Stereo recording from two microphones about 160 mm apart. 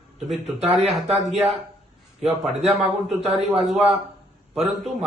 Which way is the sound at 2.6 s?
40° right (ahead or behind).